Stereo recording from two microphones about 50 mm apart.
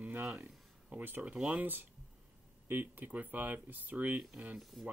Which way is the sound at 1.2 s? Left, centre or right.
Right.